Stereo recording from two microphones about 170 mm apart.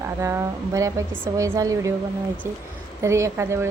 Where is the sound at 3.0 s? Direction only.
15° right (ahead or behind).